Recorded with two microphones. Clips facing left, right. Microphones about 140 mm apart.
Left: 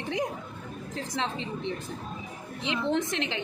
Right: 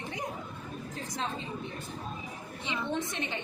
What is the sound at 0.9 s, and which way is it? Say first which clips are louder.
A woman's voice: left 5 dB; 90° left.